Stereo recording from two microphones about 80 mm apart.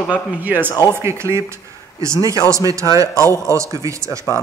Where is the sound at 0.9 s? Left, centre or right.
Right.